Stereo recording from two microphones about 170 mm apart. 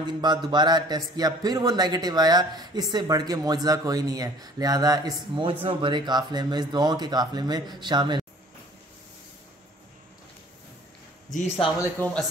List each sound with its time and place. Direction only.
0.0 s speech: 25° right (ahead or behind)
11.8 s speech: 10° left (ahead or behind)